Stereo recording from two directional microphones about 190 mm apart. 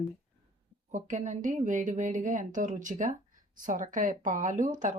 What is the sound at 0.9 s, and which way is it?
Speech, 40° right (ahead or behind).